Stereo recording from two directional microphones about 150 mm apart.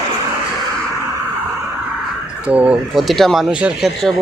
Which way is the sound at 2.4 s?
10° right (ahead or behind).